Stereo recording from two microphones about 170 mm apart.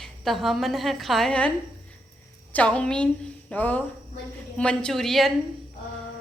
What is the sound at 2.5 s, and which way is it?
A woman's voice, 5° left (ahead or behind).